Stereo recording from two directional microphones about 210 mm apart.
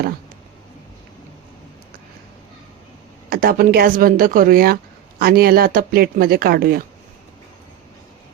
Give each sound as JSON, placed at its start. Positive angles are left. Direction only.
{"t": 3.2, "sound": "speech", "side_deg": -45}